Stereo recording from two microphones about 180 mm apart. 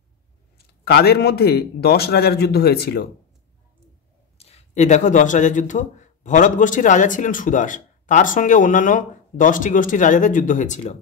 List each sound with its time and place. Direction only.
0.8 s a man's voice: 60° left (ahead or behind)
4.4 s speech: 35° left (ahead or behind)